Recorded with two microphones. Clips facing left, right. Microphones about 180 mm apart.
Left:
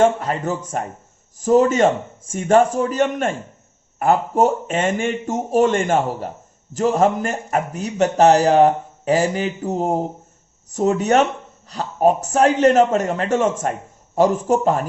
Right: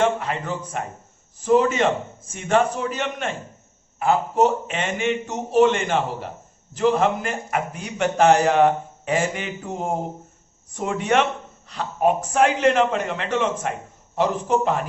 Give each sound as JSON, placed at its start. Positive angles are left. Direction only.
{"t": 0.0, "sound": "a man's voice", "side_deg": 40}